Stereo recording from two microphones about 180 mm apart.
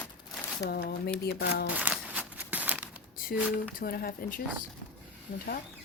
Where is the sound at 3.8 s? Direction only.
55° left (ahead or behind).